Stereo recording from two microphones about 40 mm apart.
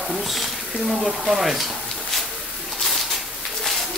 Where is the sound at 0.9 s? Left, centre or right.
Centre.